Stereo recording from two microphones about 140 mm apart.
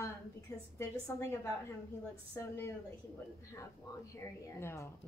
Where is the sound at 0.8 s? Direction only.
20° left (ahead or behind).